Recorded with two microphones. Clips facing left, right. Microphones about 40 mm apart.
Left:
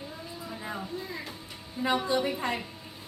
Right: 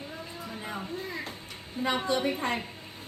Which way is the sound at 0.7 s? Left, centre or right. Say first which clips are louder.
Right 1 dB; right.